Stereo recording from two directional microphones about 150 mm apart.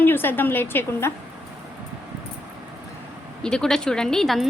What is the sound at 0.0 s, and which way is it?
A woman's voice, 15° left (ahead or behind).